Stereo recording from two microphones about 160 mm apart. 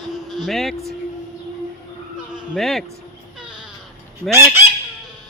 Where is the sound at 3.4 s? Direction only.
5° right (ahead or behind).